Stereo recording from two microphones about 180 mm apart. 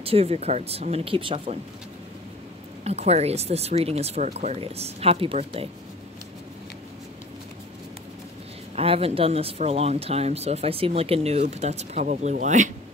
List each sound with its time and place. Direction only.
0.0 s speech: 35° right (ahead or behind)
2.8 s speech: 35° right (ahead or behind)
8.7 s speech: 35° right (ahead or behind)